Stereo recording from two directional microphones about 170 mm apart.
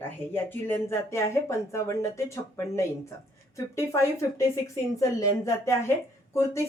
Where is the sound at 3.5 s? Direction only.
15° left (ahead or behind).